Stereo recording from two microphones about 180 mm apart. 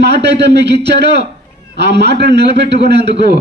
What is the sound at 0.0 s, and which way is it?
A man's voice, 70° right (ahead or behind).